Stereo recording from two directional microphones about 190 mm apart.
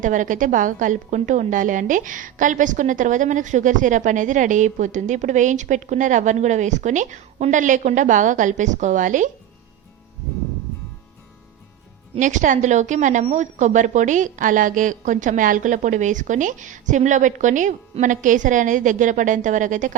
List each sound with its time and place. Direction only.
0.0 s a woman's voice: 40° right (ahead or behind)
12.1 s a woman's voice: 40° right (ahead or behind)